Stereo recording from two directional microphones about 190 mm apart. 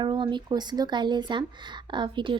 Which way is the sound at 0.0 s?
25° right (ahead or behind).